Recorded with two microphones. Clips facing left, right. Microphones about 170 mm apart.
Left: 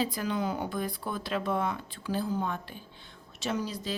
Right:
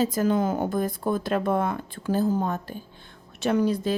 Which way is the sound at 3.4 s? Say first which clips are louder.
Right 10 dB; 55° right (ahead or behind).